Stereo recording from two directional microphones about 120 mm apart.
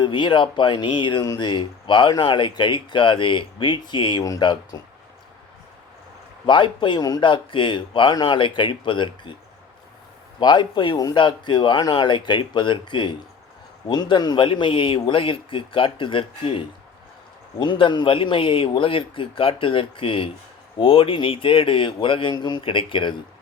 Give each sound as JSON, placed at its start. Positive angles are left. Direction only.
{"t": 0.0, "sound": "speech", "side_deg": 40}
{"t": 6.4, "sound": "a man's voice", "side_deg": 40}
{"t": 10.4, "sound": "a man's voice", "side_deg": 40}